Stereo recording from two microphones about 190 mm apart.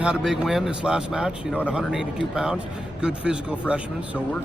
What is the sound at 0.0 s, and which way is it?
Speech, 5° right (ahead or behind).